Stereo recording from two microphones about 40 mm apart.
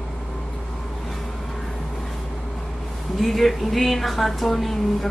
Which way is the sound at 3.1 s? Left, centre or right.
Centre.